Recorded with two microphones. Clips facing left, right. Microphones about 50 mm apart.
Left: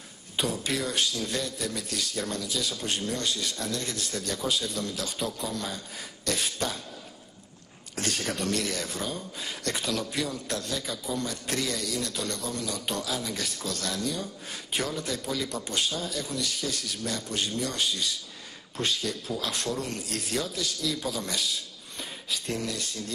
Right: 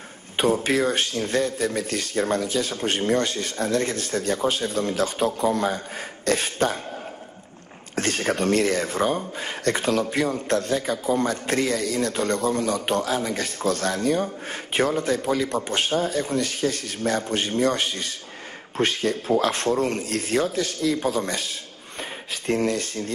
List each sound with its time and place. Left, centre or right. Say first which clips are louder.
0.4 s speech: right 9 dB; right
7.9 s speech: right 7 dB; right